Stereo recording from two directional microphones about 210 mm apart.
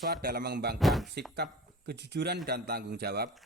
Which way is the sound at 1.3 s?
50° right (ahead or behind).